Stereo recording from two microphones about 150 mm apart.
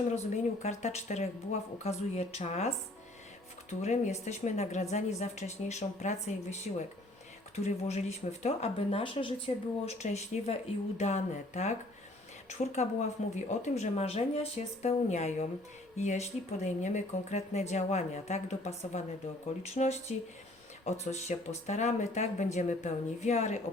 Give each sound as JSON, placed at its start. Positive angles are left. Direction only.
{"t": 0.6, "sound": "a woman's voice", "side_deg": 50}
{"t": 9.8, "sound": "a woman's voice", "side_deg": 50}